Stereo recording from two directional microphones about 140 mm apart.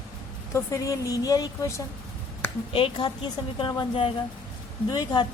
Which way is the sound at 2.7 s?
35° left (ahead or behind).